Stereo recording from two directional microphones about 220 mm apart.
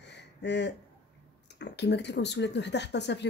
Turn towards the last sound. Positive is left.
turn(degrees=50)  # may be behind; listen again after turning